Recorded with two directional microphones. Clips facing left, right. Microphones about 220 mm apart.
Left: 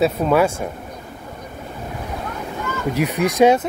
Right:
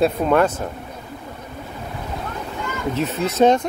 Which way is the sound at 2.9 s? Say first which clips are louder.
Left 3 dB; 15° left (ahead or behind).